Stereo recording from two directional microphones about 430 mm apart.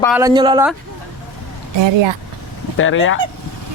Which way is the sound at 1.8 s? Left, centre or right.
Right.